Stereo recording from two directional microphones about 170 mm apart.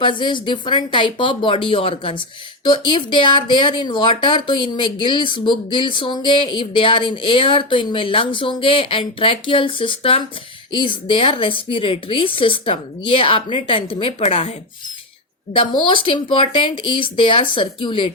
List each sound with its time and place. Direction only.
0.0 s a woman's voice: 30° left (ahead or behind)
15.5 s speech: 30° left (ahead or behind)